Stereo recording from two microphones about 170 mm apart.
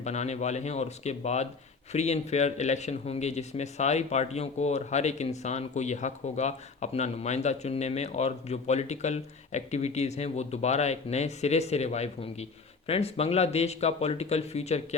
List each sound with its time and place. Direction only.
0.0 s speech: 40° left (ahead or behind)